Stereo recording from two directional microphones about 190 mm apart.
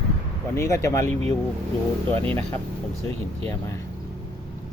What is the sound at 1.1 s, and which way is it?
Speech, 35° right (ahead or behind).